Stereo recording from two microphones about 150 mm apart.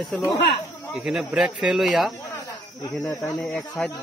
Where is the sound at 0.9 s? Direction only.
5° right (ahead or behind).